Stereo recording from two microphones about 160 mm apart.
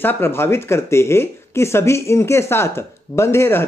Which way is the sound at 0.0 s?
15° left (ahead or behind).